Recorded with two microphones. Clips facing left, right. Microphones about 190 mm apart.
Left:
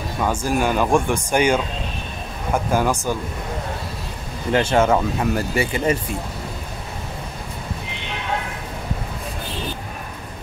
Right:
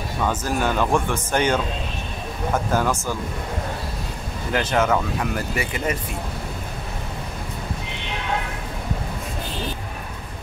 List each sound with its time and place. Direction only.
0.2 s speech: 10° left (ahead or behind)
4.5 s speech: 25° left (ahead or behind)